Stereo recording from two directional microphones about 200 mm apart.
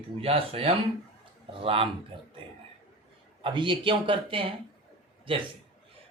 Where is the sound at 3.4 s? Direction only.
25° right (ahead or behind).